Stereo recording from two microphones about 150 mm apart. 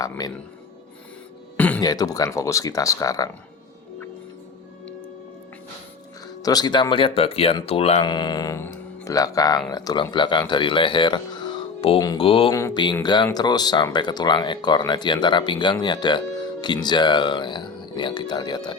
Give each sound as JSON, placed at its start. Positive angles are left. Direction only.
{"t": 0.0, "sound": "speech", "side_deg": 25}
{"t": 1.5, "sound": "a sound", "side_deg": 10}
{"t": 1.8, "sound": "speech", "side_deg": 25}
{"t": 6.4, "sound": "speech", "side_deg": 25}
{"t": 8.0, "sound": "speech", "side_deg": 30}
{"t": 12.2, "sound": "speech", "side_deg": 35}
{"t": 12.5, "sound": "speech", "side_deg": 20}